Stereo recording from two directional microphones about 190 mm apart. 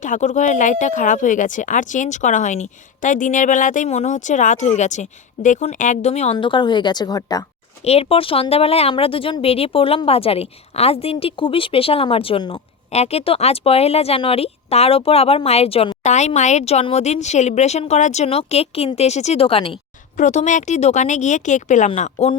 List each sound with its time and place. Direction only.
0.0 s speech: 40° left (ahead or behind); by 7.4 s 20° left (ahead or behind)
7.9 s speech: 30° left (ahead or behind)
20.1 s speech: 40° left (ahead or behind)